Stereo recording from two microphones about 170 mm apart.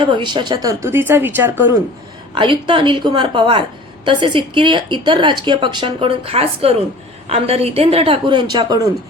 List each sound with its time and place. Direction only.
0.0 s speech: 25° right (ahead or behind)
2.3 s a woman's voice: 30° right (ahead or behind)